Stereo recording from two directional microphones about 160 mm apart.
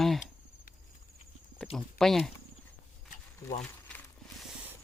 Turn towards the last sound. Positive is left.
turn(degrees=0)  # may be behind; listen again after turning